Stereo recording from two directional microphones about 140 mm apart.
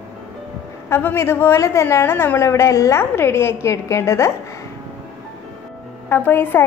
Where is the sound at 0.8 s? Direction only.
15° left (ahead or behind).